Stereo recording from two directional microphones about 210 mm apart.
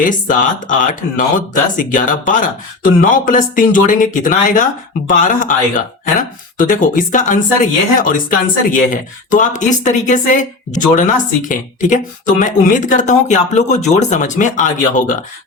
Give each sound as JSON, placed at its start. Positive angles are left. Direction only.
{"t": 0.0, "sound": "speech", "side_deg": 40}